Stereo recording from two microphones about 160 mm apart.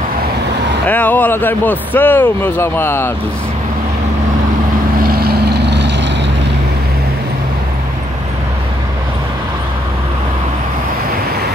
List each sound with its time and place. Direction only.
0.8 s speech: 10° left (ahead or behind)
5.0 s vehicle: 70° right (ahead or behind); by 5.9 s 90° right